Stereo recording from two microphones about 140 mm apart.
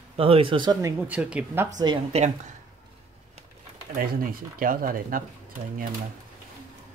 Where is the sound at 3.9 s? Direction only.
90° right.